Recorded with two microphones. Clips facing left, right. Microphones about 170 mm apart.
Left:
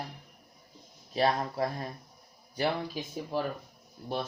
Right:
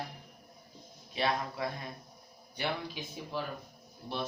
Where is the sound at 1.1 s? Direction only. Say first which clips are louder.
Left 5 dB; 40° left (ahead or behind).